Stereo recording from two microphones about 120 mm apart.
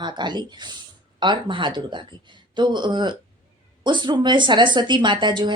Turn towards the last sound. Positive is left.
turn(degrees=-40)  # may be behind; listen again after turning